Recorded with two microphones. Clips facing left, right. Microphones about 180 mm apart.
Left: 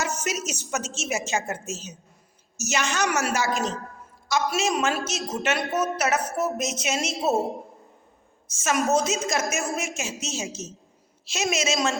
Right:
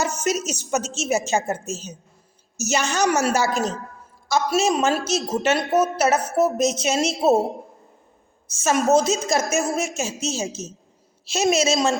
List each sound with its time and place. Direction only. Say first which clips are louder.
0.0 s a sound: right 5 dB; 30° right (ahead or behind)
0.7 s a woman's voice: right 7 dB; 35° right (ahead or behind)
8.4 s a woman's voice: right 5 dB; 30° right (ahead or behind)